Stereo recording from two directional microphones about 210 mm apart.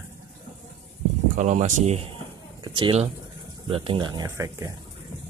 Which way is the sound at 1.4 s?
35° right (ahead or behind).